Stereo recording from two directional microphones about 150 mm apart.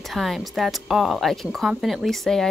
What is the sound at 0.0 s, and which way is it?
A woman's voice, centre (ahead or behind).